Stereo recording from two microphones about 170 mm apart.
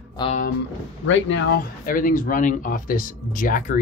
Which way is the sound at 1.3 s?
90° left.